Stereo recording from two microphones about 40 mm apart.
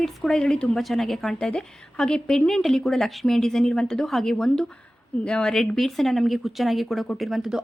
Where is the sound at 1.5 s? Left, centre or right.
Left.